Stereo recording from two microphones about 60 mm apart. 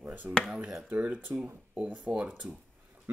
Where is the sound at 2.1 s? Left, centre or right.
Right.